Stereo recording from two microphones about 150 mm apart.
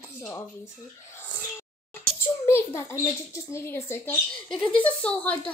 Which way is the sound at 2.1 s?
15° left (ahead or behind).